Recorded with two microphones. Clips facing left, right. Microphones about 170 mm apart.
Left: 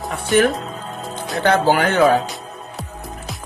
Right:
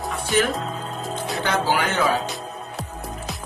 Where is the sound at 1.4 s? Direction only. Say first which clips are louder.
Left 7 dB; 60° left (ahead or behind).